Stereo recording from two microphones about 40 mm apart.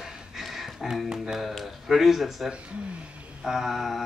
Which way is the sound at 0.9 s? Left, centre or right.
Centre.